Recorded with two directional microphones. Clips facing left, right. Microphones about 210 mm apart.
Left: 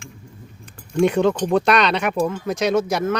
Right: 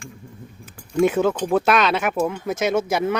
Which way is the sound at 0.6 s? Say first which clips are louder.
Even; 5° right (ahead or behind).